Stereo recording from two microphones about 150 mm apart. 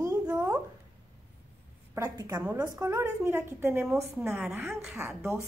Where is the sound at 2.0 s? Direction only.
20° right (ahead or behind).